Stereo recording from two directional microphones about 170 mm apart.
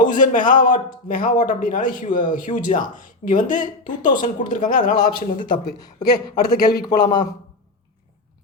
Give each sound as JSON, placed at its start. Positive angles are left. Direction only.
{"t": 0.0, "sound": "speech", "side_deg": 50}
{"t": 5.5, "sound": "a man's voice", "side_deg": 25}